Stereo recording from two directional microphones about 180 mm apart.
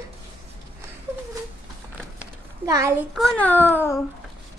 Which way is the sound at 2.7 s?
15° right (ahead or behind).